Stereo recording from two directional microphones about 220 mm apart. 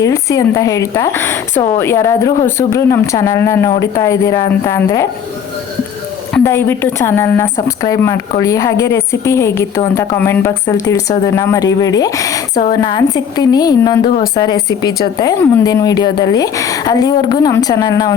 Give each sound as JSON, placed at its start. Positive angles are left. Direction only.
{"t": 0.0, "sound": "speech", "side_deg": 15}
{"t": 6.4, "sound": "speech", "side_deg": 10}